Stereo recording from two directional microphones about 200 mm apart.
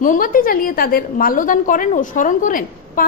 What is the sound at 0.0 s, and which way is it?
A woman's voice, 45° left (ahead or behind).